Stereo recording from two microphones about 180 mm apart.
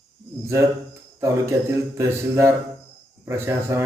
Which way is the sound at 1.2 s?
15° right (ahead or behind).